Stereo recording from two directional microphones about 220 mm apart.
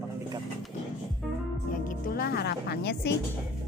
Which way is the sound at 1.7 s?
40° left (ahead or behind).